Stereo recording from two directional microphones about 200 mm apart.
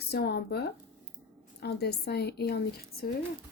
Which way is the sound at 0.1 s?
55° left (ahead or behind).